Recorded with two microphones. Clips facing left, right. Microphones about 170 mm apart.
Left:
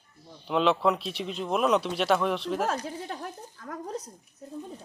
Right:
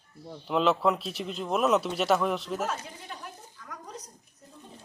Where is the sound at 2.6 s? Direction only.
50° left (ahead or behind).